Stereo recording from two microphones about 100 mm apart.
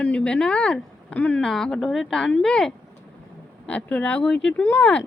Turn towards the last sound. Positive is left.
turn(degrees=20)  # may be behind; listen again after turning